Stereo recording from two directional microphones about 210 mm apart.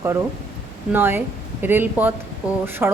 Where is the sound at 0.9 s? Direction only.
10° right (ahead or behind).